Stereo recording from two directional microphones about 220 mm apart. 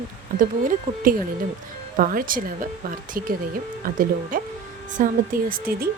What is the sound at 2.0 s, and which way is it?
Speech, 40° right (ahead or behind).